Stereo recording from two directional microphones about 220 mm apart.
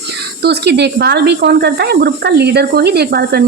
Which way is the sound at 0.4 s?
50° right (ahead or behind).